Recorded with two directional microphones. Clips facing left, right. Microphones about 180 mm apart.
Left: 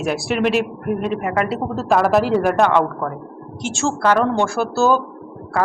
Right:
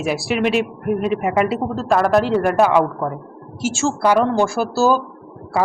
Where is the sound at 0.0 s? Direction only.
Centre (ahead or behind).